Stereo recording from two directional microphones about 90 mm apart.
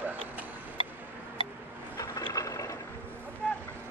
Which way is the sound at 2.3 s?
40° left (ahead or behind).